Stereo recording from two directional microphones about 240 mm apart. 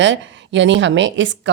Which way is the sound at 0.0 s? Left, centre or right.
Right.